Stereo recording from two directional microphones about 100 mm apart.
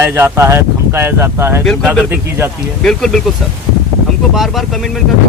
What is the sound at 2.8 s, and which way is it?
Speech, 5° left (ahead or behind).